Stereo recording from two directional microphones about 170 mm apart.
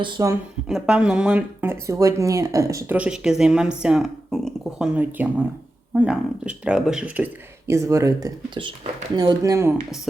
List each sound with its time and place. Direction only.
0.0 s speech: 20° right (ahead or behind)
0.7 s speech: 5° right (ahead or behind)
3.0 s speech: 5° right (ahead or behind)